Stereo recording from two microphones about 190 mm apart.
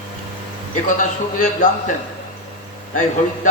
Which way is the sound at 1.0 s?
40° left (ahead or behind).